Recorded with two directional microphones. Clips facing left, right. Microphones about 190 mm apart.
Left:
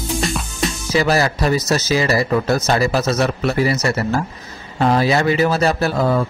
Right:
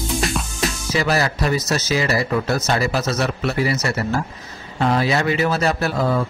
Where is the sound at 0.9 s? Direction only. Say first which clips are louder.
Left 4 dB; 35° left (ahead or behind).